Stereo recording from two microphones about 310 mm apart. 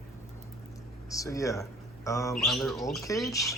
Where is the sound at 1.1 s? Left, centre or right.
Centre.